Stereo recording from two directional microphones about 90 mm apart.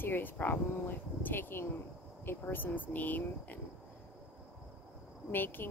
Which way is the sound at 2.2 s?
25° left (ahead or behind).